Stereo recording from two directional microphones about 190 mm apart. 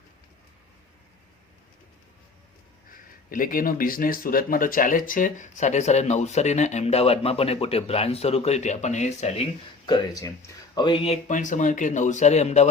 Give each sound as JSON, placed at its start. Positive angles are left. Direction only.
{"t": 2.9, "sound": "speech", "side_deg": 45}